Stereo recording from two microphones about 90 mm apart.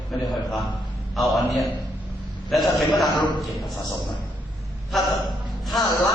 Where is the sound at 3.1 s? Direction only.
55° left (ahead or behind).